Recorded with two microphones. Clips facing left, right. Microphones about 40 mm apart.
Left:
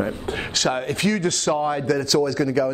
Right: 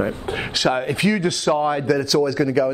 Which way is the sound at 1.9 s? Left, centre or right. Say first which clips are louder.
Right 2 dB; centre.